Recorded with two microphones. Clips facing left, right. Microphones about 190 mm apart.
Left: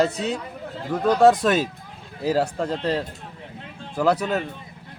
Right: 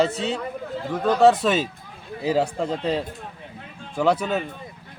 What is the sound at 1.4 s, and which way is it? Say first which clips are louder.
A man's voice: left 1 dB; centre (ahead or behind).